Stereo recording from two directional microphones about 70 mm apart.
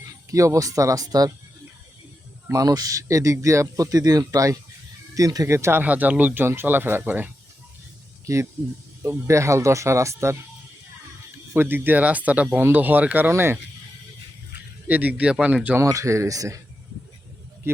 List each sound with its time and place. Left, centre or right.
0.0 s speech: right
2.5 s speech: right
5.5 s speech: right
5.8 s speech: right
8.3 s speech: right
11.5 s speech: right
14.8 s speech: right
15.8 s speech: right